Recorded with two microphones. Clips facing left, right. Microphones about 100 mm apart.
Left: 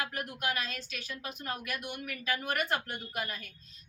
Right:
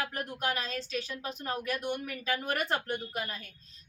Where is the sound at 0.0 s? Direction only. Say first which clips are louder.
Right 2 dB; 35° right (ahead or behind).